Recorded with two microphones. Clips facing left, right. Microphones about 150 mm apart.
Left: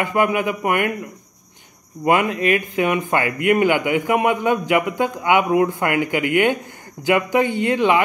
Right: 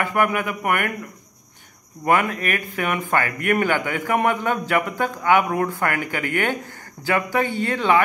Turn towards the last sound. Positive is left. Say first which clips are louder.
# left 2 dB
turn(degrees=15)  # may be behind; listen again after turning